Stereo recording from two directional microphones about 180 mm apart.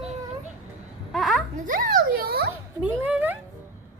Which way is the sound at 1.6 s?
50° right (ahead or behind).